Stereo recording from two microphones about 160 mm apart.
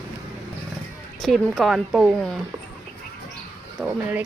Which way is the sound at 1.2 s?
Centre (ahead or behind).